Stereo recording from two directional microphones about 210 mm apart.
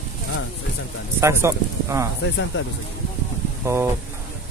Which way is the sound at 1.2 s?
15° right (ahead or behind).